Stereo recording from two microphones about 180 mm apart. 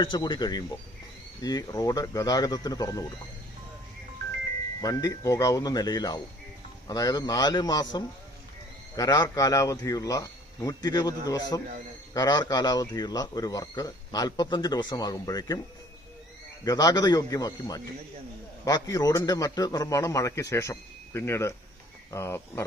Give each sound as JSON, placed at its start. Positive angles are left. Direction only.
{"t": 0.0, "sound": "speech", "side_deg": 25}
{"t": 4.8, "sound": "speech", "side_deg": 20}
{"t": 16.6, "sound": "a man's voice", "side_deg": 20}